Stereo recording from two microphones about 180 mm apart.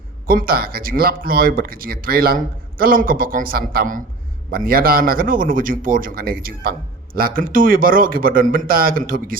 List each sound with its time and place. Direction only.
0.3 s speech: 55° right (ahead or behind)